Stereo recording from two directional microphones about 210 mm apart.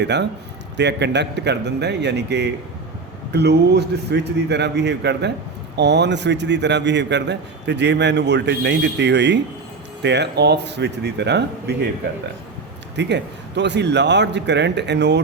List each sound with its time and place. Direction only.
0.0 s a man's voice: 55° right (ahead or behind)
13.0 s a man's voice: 55° right (ahead or behind)